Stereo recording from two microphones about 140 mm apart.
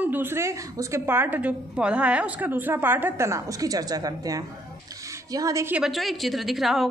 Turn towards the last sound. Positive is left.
turn(degrees=0)  # may be behind; listen again after turning